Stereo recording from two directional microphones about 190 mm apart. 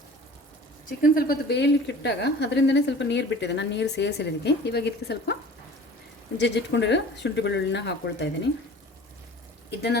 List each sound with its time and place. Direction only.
0.9 s speech: 50° left (ahead or behind); by 8.3 s 65° left (ahead or behind)
9.6 s speech: 60° left (ahead or behind)